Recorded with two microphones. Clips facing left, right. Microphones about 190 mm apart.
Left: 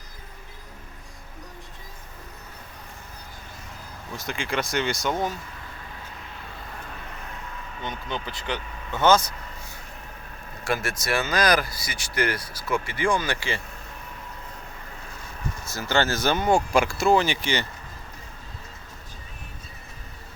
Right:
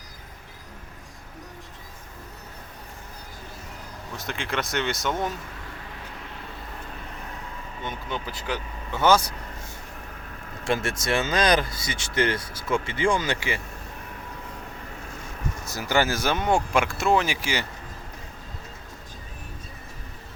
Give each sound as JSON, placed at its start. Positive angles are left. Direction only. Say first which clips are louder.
{"t": 4.2, "sound": "speech", "louder": "left 1 dB", "side_deg": 0}
{"t": 7.9, "sound": "speech", "louder": "even", "side_deg": -5}
{"t": 10.6, "sound": "speech", "louder": "right 2 dB", "side_deg": -25}
{"t": 15.7, "sound": "speech", "louder": "even", "side_deg": -15}